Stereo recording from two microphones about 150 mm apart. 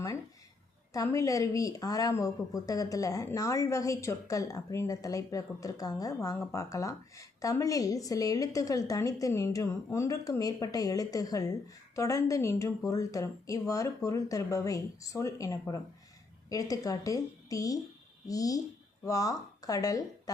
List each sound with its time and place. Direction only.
0.9 s a woman's voice: 20° left (ahead or behind)